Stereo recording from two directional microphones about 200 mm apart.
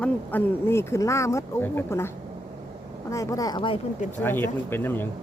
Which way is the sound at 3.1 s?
15° left (ahead or behind).